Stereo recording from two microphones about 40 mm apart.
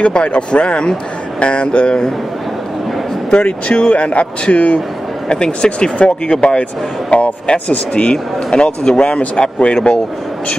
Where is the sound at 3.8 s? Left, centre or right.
Left.